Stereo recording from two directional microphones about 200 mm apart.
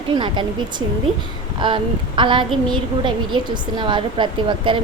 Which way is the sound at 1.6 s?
25° right (ahead or behind).